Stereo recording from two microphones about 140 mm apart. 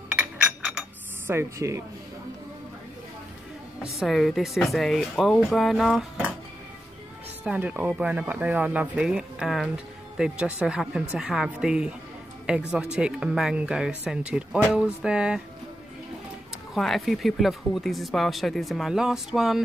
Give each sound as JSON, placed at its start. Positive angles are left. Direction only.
{"t": 0.1, "sound": "chink", "side_deg": -5}
{"t": 1.2, "sound": "speech", "side_deg": -15}
{"t": 4.0, "sound": "speech", "side_deg": 0}
{"t": 7.4, "sound": "speech", "side_deg": -10}
{"t": 16.7, "sound": "speech", "side_deg": 0}